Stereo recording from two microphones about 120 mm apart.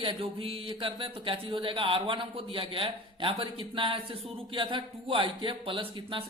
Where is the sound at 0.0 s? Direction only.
50° right (ahead or behind).